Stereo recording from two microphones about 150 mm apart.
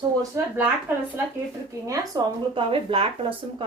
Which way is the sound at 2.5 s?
35° right (ahead or behind).